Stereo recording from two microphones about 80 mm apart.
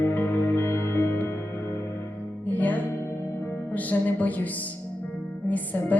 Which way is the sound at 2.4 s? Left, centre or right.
Left.